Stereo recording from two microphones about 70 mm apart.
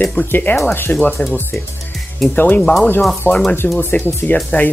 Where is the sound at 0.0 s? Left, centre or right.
Left.